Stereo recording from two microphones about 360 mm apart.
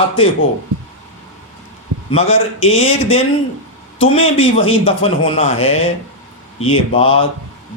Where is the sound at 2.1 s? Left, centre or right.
Centre.